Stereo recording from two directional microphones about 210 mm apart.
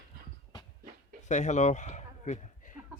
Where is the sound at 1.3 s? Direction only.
35° left (ahead or behind).